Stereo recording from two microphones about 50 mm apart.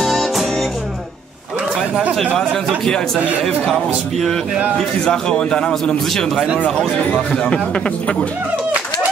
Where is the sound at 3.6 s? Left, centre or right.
Centre.